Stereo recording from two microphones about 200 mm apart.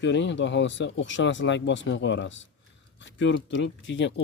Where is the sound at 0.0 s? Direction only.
65° left (ahead or behind).